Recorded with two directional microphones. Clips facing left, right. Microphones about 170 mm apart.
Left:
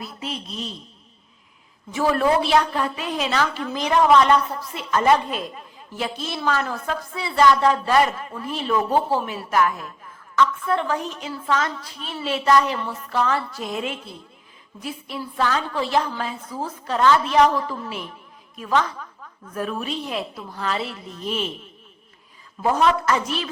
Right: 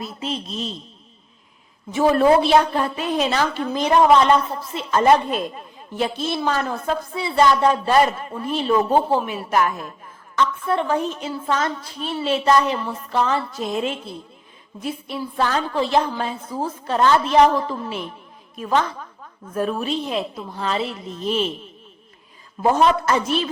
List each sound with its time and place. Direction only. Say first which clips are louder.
0.0 s speech: right 4 dB; 25° right (ahead or behind)
1.9 s speech: right 4 dB; 25° right (ahead or behind)
15.4 s a woman's voice: even; 35° right (ahead or behind)
15.8 s speech: right 4 dB; 25° right (ahead or behind)
22.6 s speech: right 2 dB; 25° right (ahead or behind)